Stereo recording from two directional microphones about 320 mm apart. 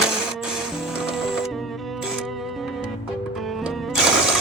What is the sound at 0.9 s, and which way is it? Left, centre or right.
Music, centre.